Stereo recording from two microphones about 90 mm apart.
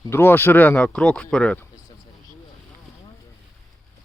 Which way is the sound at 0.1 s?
25° left (ahead or behind).